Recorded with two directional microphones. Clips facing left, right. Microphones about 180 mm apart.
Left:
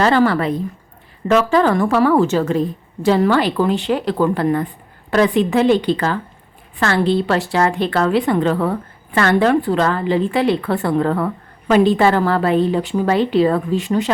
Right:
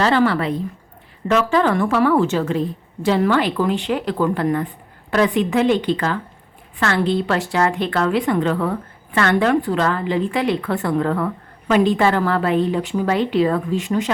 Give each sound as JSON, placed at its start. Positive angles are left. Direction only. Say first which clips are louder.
{"t": 0.0, "sound": "a woman's voice", "louder": "left 2 dB", "side_deg": 45}